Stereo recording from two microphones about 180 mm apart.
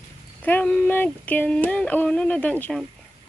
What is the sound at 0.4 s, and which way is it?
Speech, 10° left (ahead or behind).